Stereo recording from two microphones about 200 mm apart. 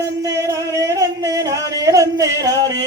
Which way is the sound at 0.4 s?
15° right (ahead or behind).